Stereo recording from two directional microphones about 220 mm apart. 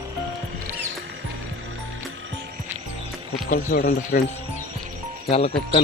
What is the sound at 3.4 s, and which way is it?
Speech, 40° left (ahead or behind).